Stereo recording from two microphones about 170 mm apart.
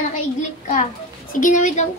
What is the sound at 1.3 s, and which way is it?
Speech, 50° left (ahead or behind).